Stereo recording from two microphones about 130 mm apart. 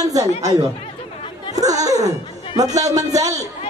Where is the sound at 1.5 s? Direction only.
25° right (ahead or behind).